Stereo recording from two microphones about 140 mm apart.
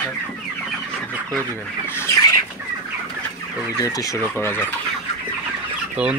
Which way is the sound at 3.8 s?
25° left (ahead or behind).